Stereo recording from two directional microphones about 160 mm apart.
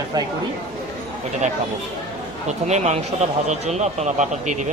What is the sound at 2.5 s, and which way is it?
Speech, 45° right (ahead or behind).